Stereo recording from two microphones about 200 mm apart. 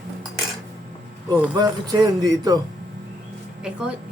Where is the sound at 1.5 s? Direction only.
20° right (ahead or behind).